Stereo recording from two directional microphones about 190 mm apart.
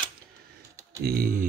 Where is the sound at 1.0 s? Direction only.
50° right (ahead or behind).